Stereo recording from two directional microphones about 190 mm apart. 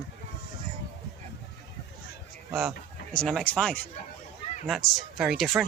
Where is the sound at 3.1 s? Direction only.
Centre (ahead or behind).